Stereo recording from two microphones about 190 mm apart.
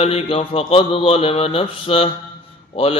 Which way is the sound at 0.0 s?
30° left (ahead or behind).